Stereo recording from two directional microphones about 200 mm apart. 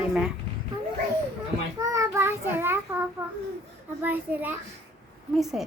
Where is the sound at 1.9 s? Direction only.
15° right (ahead or behind).